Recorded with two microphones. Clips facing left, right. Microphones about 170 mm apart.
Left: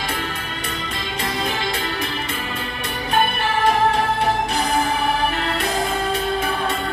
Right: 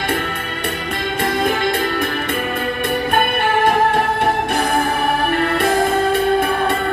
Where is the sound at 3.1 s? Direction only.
55° right (ahead or behind).